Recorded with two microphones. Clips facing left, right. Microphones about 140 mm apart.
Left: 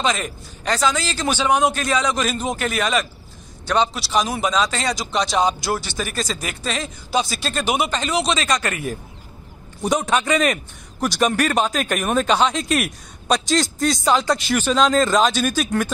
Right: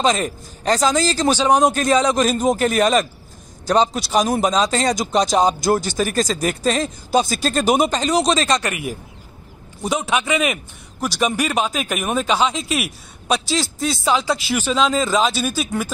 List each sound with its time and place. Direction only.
0.0 s a man's voice: 35° right (ahead or behind)
8.5 s a man's voice: 15° right (ahead or behind)